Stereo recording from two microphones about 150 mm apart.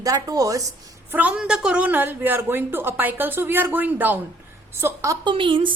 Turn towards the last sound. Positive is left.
turn(degrees=-35)  # may be behind; listen again after turning